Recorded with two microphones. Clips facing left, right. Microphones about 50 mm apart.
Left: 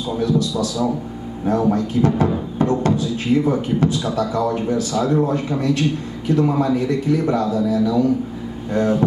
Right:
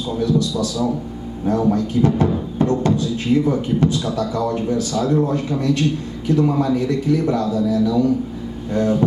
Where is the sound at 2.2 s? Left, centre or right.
Centre.